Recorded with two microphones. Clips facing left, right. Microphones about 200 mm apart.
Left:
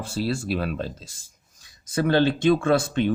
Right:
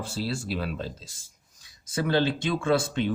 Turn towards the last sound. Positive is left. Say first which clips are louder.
# left 3 dB
turn(degrees=55)  # may be behind; listen again after turning